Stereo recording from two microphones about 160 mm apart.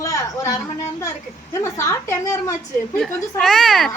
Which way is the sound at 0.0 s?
20° left (ahead or behind).